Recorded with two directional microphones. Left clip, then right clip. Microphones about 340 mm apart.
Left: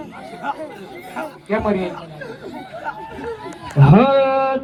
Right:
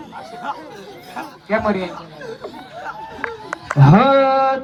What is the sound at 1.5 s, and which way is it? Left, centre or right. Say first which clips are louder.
Speech: right 1 dB; right.